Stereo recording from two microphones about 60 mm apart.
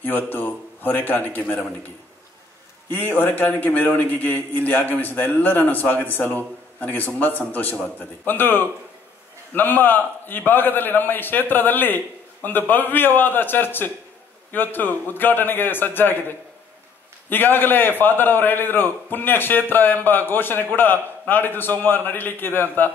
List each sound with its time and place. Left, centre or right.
0.0 s a man's voice: left
2.9 s a man's voice: left